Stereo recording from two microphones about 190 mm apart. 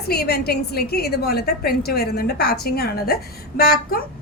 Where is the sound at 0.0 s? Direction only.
55° left (ahead or behind).